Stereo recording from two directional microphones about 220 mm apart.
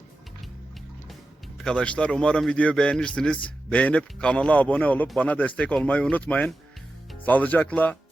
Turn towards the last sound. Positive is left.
turn(degrees=5)  # may be behind; listen again after turning